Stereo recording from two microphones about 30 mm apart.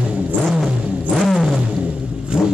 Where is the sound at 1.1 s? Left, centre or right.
Centre.